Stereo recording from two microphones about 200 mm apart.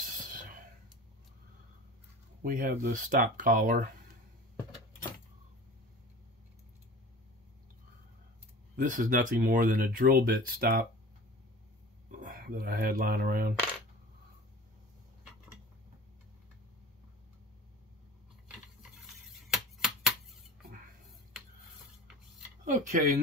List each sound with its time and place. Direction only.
0.0 s whispering: 40° right (ahead or behind)
2.4 s speech: 45° right (ahead or behind)
8.7 s speech: 40° right (ahead or behind)
12.1 s speech: 45° right (ahead or behind)
18.8 s a sound: centre (ahead or behind)
22.7 s speech: 40° right (ahead or behind)